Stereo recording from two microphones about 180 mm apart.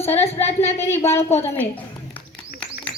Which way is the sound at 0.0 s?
35° left (ahead or behind).